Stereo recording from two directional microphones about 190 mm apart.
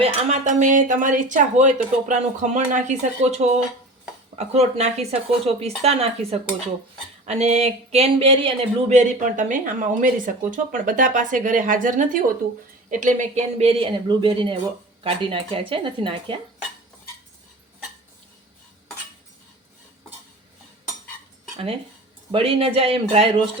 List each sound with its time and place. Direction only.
0.0 s speech: 35° right (ahead or behind)
22.3 s speech: 30° right (ahead or behind)